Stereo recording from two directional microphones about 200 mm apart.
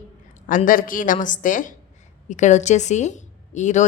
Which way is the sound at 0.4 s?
40° left (ahead or behind).